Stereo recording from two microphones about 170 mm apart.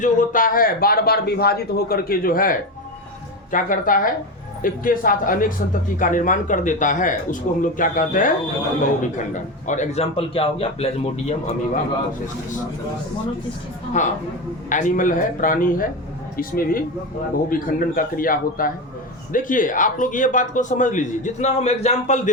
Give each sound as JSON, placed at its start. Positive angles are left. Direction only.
{"t": 0.0, "sound": "a man's voice", "side_deg": 50}
{"t": 14.0, "sound": "a man's voice", "side_deg": 45}